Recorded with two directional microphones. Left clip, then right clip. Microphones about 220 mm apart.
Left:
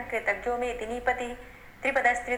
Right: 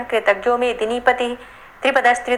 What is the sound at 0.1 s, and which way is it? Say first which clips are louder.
A woman's voice: right 12 dB; 30° right (ahead or behind).